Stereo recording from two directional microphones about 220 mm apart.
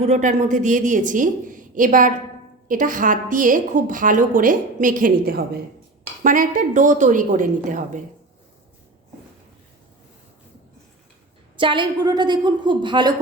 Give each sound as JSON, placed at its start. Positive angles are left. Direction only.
{"t": 0.0, "sound": "a woman's voice", "side_deg": -30}
{"t": 11.5, "sound": "a woman's voice", "side_deg": -20}